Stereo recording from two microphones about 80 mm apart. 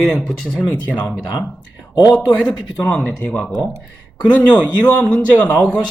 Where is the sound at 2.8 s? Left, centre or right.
Left.